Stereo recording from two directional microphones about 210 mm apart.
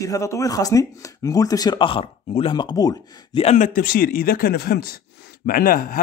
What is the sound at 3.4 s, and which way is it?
Speech, 35° left (ahead or behind).